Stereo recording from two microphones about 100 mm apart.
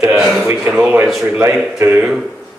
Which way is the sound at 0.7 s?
10° right (ahead or behind).